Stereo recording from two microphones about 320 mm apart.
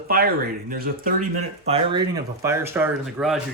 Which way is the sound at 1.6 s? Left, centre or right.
Centre.